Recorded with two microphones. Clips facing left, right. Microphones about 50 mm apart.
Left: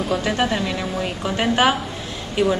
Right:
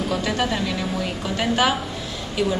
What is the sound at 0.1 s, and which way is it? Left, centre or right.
A woman's voice, centre.